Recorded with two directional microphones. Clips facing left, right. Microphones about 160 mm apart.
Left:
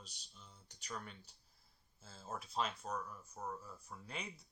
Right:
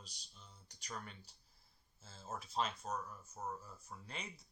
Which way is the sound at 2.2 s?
5° right (ahead or behind).